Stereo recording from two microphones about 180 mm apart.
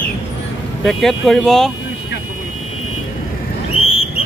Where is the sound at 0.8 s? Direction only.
Centre (ahead or behind).